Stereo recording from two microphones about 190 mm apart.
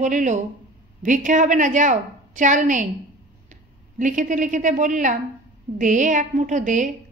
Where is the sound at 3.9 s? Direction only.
45° right (ahead or behind).